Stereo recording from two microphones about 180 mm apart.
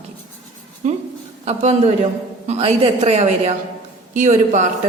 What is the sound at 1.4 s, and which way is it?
A woman's voice, 40° right (ahead or behind).